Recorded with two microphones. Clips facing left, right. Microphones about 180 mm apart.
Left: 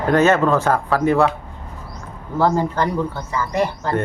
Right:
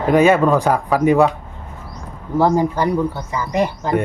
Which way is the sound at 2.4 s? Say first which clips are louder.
Right 2 dB; 15° right (ahead or behind).